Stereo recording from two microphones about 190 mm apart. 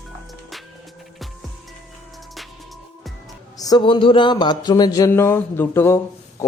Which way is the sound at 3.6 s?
20° left (ahead or behind).